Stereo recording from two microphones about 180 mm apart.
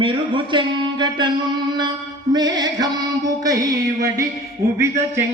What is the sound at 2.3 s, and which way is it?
Speech, 20° right (ahead or behind).